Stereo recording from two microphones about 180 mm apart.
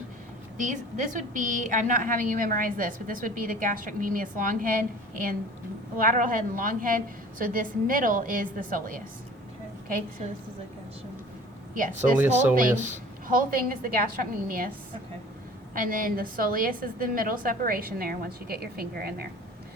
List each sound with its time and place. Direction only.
0.5 s a woman's voice: 45° right (ahead or behind)
11.7 s a woman's voice: 45° right (ahead or behind)
15.7 s a woman's voice: 50° right (ahead or behind)